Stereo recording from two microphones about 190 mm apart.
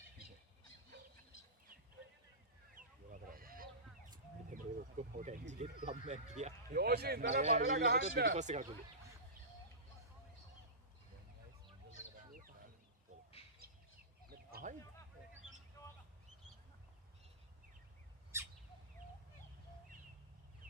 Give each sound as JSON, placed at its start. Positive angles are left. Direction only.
{"t": 2.7, "sound": "goose", "side_deg": -45}
{"t": 4.4, "sound": "speech", "side_deg": -45}
{"t": 6.7, "sound": "a man's voice", "side_deg": -55}
{"t": 7.4, "sound": "a man's voice", "side_deg": -35}
{"t": 7.8, "sound": "a man's voice", "side_deg": -60}
{"t": 8.3, "sound": "a man's voice", "side_deg": -40}
{"t": 12.3, "sound": "a sound", "side_deg": -45}
{"t": 13.4, "sound": "bird", "side_deg": 30}
{"t": 14.3, "sound": "a sound", "side_deg": -50}